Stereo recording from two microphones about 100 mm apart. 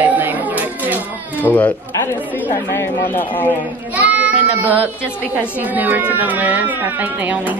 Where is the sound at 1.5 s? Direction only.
15° left (ahead or behind).